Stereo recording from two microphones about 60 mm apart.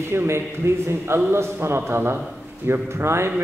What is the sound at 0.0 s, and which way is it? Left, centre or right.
A man's voice, right.